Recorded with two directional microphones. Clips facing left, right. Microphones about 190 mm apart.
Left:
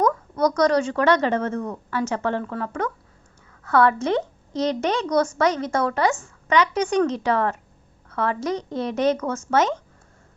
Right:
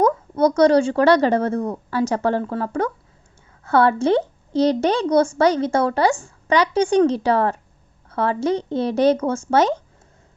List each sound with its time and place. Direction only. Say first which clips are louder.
0.0 s a woman's voice: right 3 dB; 25° right (ahead or behind)